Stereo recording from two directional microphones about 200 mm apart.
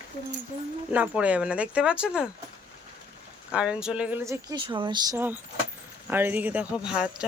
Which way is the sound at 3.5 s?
5° right (ahead or behind).